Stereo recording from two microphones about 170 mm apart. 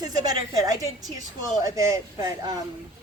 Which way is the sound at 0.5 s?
20° right (ahead or behind).